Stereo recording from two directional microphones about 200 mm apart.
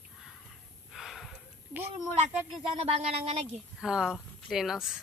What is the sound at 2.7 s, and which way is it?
Speech, 30° right (ahead or behind).